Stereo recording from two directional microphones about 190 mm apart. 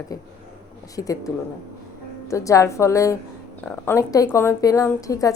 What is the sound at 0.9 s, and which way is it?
Speech, 20° left (ahead or behind).